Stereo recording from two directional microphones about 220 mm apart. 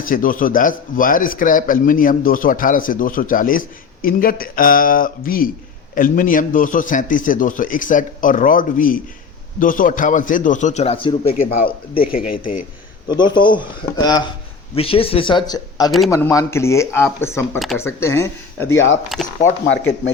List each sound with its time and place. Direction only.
0.0 s speech: 40° left (ahead or behind)
11.3 s speech: 40° left (ahead or behind)
13.1 s speech: 20° left (ahead or behind)
19.1 s speech: centre (ahead or behind)